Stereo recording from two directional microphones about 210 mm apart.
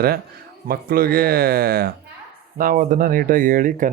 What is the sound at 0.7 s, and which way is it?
Speech, 45° right (ahead or behind).